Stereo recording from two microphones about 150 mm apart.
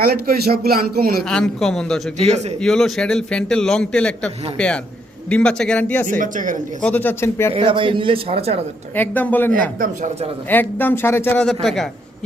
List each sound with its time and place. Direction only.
0.0 s speech: 90° right
1.3 s a man's voice: 5° left (ahead or behind)
6.1 s speech: 60° right (ahead or behind)
6.8 s a man's voice: 10° left (ahead or behind)
7.5 s a man's voice: 35° right (ahead or behind)
9.0 s a man's voice: 10° left (ahead or behind)
9.8 s speech: 55° right (ahead or behind)
10.5 s a man's voice: 15° left (ahead or behind)